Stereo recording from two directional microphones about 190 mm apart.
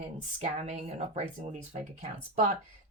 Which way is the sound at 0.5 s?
35° right (ahead or behind).